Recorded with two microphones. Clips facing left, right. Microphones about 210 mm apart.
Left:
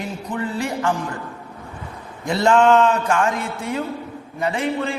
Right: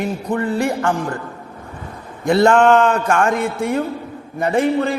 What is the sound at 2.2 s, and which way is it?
A man's voice, 55° right (ahead or behind).